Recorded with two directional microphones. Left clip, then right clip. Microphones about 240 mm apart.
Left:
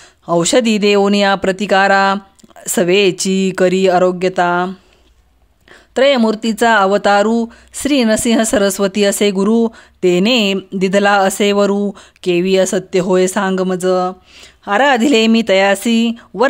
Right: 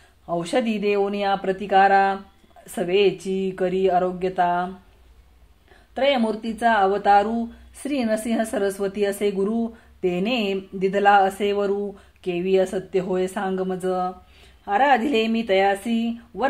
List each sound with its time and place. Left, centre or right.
0.3 s speech: left
5.9 s speech: left